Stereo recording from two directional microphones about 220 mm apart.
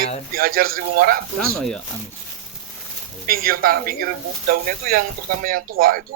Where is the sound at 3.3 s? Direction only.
40° right (ahead or behind).